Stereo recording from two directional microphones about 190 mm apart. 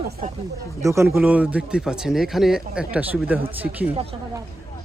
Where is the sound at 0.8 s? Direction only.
15° right (ahead or behind).